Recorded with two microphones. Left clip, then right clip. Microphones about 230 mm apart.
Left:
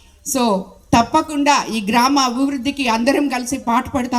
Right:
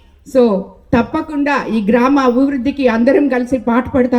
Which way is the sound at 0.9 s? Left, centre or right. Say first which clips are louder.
Left 1 dB; left.